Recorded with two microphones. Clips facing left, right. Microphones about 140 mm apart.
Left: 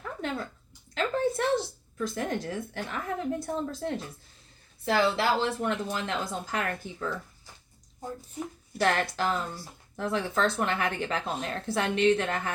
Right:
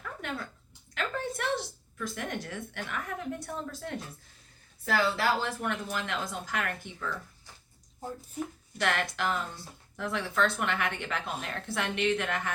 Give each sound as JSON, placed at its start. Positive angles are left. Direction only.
{"t": 0.0, "sound": "a sound", "side_deg": 30}
{"t": 0.9, "sound": "a woman's voice", "side_deg": 30}
{"t": 8.8, "sound": "speech", "side_deg": 35}